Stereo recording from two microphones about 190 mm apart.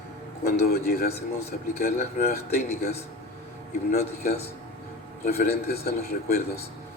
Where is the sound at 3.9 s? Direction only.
55° left (ahead or behind).